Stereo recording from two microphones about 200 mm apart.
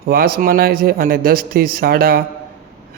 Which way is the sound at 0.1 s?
45° right (ahead or behind).